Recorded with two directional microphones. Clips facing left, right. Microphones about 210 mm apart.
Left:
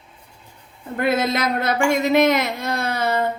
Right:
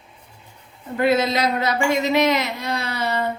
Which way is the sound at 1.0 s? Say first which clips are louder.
Right 2 dB; 50° left (ahead or behind).